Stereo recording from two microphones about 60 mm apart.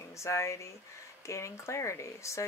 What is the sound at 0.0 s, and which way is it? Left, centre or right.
Speech, left.